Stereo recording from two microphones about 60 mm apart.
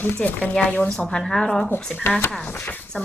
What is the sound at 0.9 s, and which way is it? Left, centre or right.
Speech, centre.